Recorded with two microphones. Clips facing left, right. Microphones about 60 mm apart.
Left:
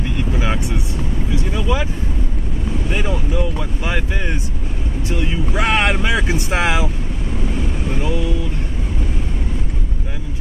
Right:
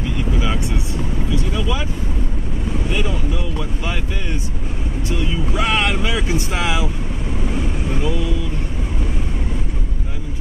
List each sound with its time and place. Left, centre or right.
1.3 s vehicle: centre
2.9 s boat: left
3.8 s a sound: left
5.6 s boat: left
6.2 s vehicle: left
7.4 s vehicle: centre